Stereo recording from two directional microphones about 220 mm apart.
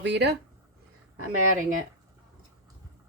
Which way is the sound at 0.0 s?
50° right (ahead or behind).